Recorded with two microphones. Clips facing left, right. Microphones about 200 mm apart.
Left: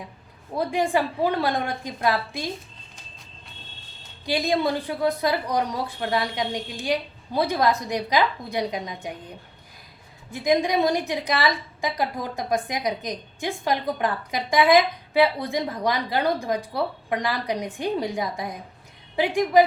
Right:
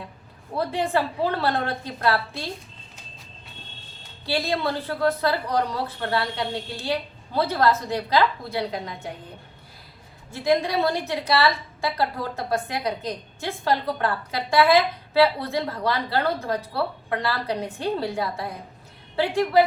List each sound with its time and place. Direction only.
0.5 s a woman's voice: 15° left (ahead or behind)
4.3 s a woman's voice: 15° left (ahead or behind)
10.3 s a woman's voice: 15° left (ahead or behind)